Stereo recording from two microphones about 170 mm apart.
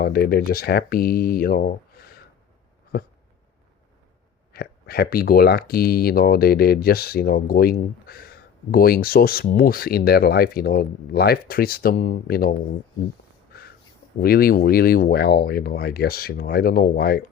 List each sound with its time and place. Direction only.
0.0 s speech: 70° left (ahead or behind)
2.9 s a sound: 65° left (ahead or behind)
4.5 s speech: 65° left (ahead or behind)
14.2 s speech: 60° left (ahead or behind)